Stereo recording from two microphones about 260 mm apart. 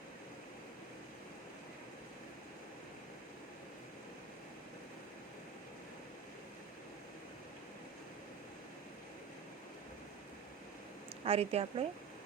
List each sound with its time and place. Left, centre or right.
11.2 s a woman's voice: right